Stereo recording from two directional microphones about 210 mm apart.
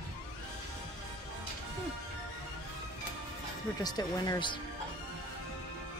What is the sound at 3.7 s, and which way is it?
Speech, 20° left (ahead or behind).